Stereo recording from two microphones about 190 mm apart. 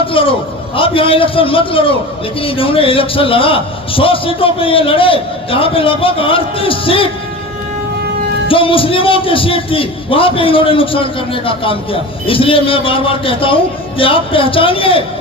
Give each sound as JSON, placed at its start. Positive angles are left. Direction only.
{"t": 0.1, "sound": "a sound", "side_deg": 30}
{"t": 0.8, "sound": "a man's voice", "side_deg": 30}
{"t": 8.4, "sound": "a man's voice", "side_deg": 30}